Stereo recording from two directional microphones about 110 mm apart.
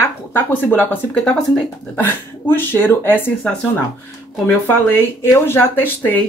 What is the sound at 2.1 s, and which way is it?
Speech, 20° left (ahead or behind).